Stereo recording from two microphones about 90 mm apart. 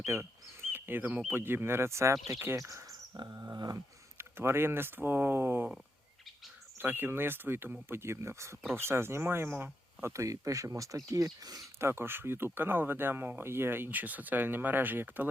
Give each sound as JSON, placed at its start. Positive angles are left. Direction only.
{"t": 0.0, "sound": "speech", "side_deg": -30}
{"t": 3.3, "sound": "dog", "side_deg": -45}
{"t": 4.2, "sound": "speech", "side_deg": -25}
{"t": 6.7, "sound": "speech", "side_deg": -25}
{"t": 11.8, "sound": "speech", "side_deg": -25}